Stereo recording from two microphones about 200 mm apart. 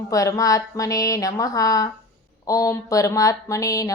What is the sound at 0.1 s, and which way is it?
Speech, 15° left (ahead or behind).